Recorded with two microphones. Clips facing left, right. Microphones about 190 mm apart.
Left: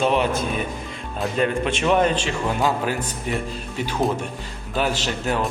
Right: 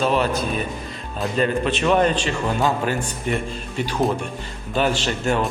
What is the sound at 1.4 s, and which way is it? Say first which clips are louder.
Speech: right 1 dB; 10° left (ahead or behind).